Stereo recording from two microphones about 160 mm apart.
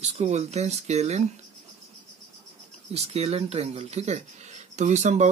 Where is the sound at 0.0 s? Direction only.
45° right (ahead or behind).